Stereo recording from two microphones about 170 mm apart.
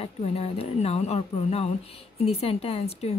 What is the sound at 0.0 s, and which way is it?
A woman's voice, 35° left (ahead or behind).